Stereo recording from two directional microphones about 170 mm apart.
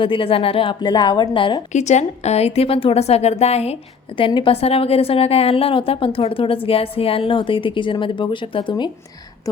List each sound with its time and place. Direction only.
0.0 s a woman's voice: 30° left (ahead or behind)
1.7 s a woman's voice: 40° left (ahead or behind); by 8.9 s 25° left (ahead or behind)